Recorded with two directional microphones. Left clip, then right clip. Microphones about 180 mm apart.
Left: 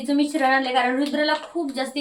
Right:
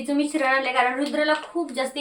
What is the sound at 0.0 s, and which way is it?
A woman's voice, 10° left (ahead or behind).